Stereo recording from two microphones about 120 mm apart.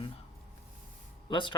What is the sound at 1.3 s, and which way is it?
Speech, 40° left (ahead or behind).